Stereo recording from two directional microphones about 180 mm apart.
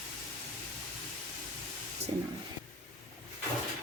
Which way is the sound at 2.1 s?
30° right (ahead or behind).